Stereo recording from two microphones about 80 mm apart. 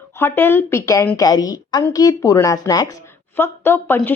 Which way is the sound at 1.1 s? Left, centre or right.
Left.